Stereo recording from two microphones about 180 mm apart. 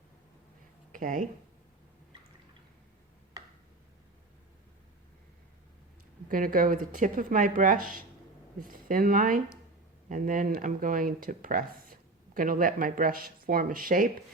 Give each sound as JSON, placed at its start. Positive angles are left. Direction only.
{"t": 0.9, "sound": "speech", "side_deg": -45}
{"t": 6.2, "sound": "speech", "side_deg": -50}